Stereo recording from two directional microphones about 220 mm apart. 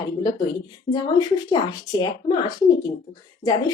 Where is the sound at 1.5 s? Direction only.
20° left (ahead or behind).